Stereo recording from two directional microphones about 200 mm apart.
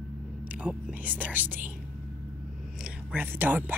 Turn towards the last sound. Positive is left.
turn(degrees=-10)  # may be behind; listen again after turning